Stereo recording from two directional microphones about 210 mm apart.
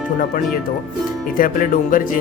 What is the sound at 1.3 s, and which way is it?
Speech, 40° left (ahead or behind).